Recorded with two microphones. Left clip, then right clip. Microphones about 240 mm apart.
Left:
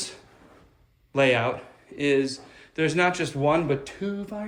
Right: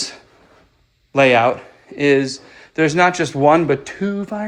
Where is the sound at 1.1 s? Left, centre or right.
Centre.